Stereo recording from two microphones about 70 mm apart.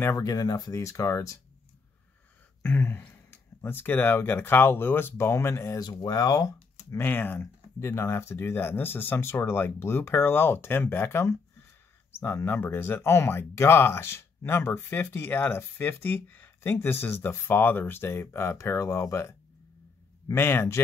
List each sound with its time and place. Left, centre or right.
0.2 s speech: left
0.7 s speech: left
2.6 s speech: left
5.9 s speech: left
7.0 s speech: left